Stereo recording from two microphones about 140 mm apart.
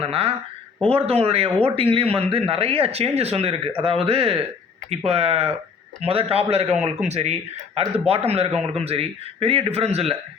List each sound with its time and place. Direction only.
0.0 s speech: 45° right (ahead or behind)